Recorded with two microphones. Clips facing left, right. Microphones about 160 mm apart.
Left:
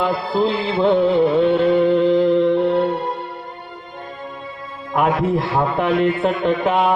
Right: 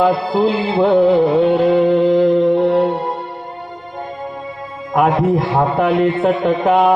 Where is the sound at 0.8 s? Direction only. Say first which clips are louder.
Right 3 dB; 40° right (ahead or behind).